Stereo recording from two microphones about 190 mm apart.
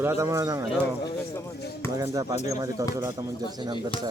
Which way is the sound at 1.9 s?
15° right (ahead or behind).